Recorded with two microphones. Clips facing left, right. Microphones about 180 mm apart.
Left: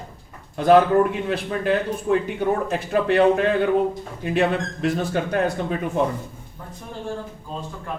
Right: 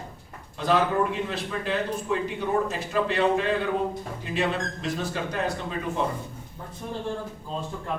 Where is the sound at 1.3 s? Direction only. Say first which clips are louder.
Left 7 dB; 55° left (ahead or behind).